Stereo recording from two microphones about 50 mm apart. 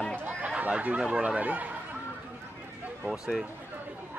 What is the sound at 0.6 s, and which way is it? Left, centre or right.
Speech, right.